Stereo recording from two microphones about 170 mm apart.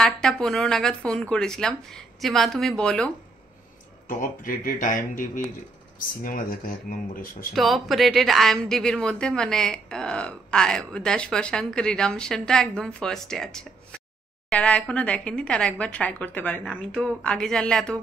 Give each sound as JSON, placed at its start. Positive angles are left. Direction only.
{"t": 0.0, "sound": "speech", "side_deg": 5}
{"t": 4.1, "sound": "speech", "side_deg": 55}
{"t": 7.5, "sound": "a woman's voice", "side_deg": 0}